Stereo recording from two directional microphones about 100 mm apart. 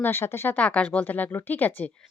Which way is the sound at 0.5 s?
15° left (ahead or behind).